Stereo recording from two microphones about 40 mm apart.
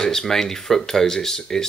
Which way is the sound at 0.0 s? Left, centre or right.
Centre.